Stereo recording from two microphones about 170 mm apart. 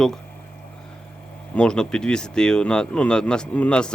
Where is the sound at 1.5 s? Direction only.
5° left (ahead or behind).